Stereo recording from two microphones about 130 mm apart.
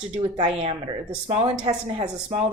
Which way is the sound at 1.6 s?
35° right (ahead or behind).